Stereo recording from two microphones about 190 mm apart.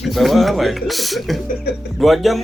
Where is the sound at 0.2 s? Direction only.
Centre (ahead or behind).